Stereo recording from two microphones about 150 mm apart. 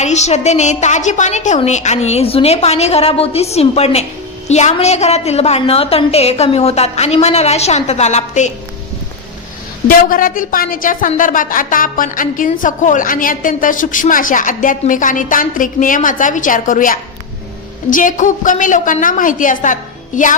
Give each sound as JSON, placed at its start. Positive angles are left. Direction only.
{"t": 0.0, "sound": "a woman's voice", "side_deg": 50}
{"t": 10.1, "sound": "a woman's voice", "side_deg": 65}